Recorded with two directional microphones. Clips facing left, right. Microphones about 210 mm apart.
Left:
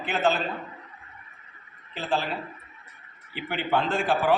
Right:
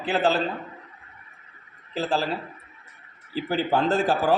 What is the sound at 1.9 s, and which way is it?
Speech, 35° right (ahead or behind).